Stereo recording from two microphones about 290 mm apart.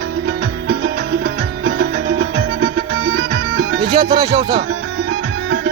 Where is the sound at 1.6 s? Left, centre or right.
Right.